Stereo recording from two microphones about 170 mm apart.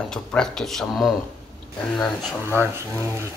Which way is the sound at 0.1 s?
5° left (ahead or behind).